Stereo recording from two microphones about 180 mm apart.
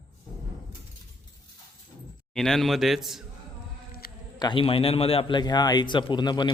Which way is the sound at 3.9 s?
55° left (ahead or behind).